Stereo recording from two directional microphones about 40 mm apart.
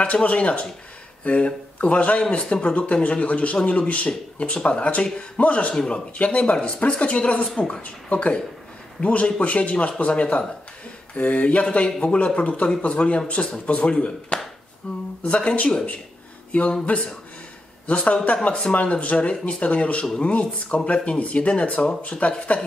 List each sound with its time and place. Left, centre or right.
0.0 s speech: left
5.8 s speech: left
6.1 s speech: left
14.3 s a sound: left
14.8 s speech: left